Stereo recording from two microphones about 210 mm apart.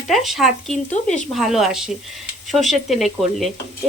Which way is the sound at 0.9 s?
35° left (ahead or behind).